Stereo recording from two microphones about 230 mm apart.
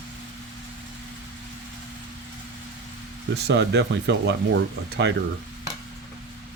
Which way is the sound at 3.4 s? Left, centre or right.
Right.